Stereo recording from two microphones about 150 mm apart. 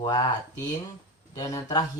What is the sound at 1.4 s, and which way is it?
Speech, 25° left (ahead or behind).